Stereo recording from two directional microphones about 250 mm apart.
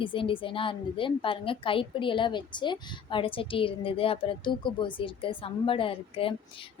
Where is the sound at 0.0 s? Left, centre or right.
Left.